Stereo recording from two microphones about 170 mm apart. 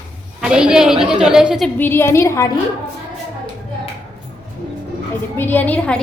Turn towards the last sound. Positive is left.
turn(degrees=10)  # may be behind; listen again after turning